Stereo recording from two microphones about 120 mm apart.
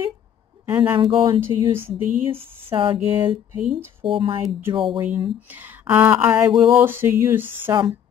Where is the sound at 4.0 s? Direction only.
45° right (ahead or behind).